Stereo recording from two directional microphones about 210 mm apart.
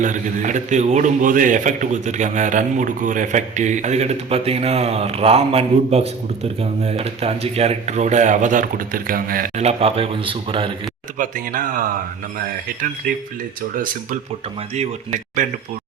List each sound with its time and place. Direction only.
0.0 s a man's voice: 35° right (ahead or behind)
11.2 s a man's voice: 40° right (ahead or behind)
13.0 s a man's voice: 45° right (ahead or behind)